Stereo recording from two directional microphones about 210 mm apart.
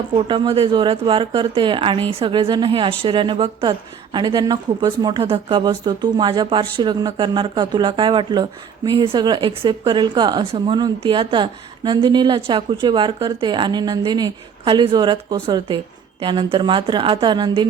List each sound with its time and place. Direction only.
0.3 s speech: 25° right (ahead or behind)